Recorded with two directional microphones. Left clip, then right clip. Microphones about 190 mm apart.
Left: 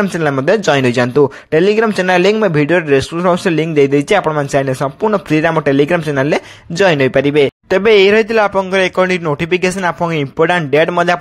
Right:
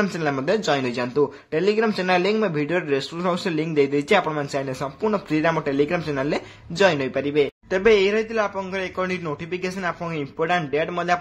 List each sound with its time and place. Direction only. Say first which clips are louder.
0.2 s speech: left 12 dB; 40° left (ahead or behind)